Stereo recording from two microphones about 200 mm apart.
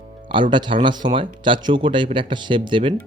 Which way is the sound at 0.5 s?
25° right (ahead or behind).